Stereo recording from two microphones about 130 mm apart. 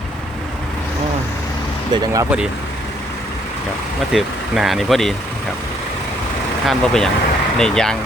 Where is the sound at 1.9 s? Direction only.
25° right (ahead or behind).